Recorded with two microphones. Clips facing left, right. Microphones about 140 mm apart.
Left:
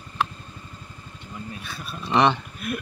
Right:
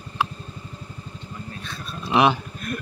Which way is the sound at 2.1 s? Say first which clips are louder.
Right 1 dB; 10° right (ahead or behind).